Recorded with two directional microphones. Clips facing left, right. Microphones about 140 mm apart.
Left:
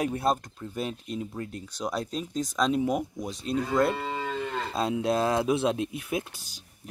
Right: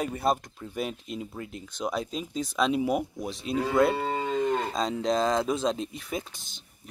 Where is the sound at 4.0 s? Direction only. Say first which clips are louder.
Right 4 dB; 45° right (ahead or behind).